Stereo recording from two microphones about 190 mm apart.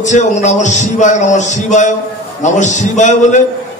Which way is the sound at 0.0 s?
40° left (ahead or behind).